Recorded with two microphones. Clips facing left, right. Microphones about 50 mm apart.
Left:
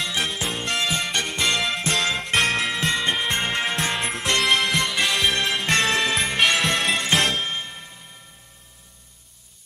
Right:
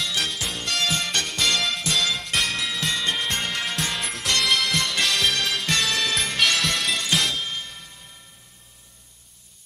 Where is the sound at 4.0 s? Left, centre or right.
Centre.